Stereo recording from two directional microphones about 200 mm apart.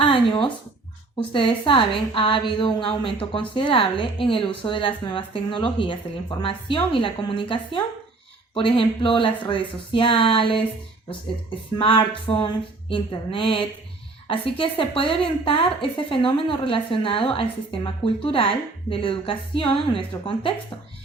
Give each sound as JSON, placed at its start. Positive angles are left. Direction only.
{"t": 0.0, "sound": "a sound", "side_deg": 25}
{"t": 1.3, "sound": "a woman's voice", "side_deg": 25}
{"t": 11.8, "sound": "a woman's voice", "side_deg": 25}